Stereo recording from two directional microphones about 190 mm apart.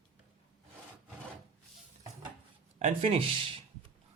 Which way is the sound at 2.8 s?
35° right (ahead or behind).